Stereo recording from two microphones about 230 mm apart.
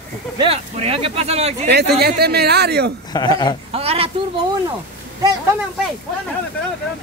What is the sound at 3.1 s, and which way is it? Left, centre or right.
Speech, centre.